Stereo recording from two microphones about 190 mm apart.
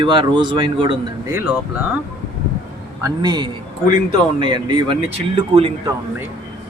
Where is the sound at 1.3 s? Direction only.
5° right (ahead or behind).